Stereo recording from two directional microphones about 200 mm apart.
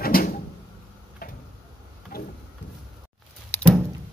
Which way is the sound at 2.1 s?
50° left (ahead or behind).